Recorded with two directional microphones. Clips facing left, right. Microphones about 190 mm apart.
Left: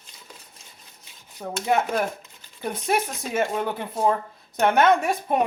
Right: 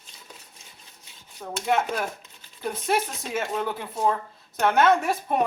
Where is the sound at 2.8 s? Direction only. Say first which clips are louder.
Left 1 dB; centre (ahead or behind).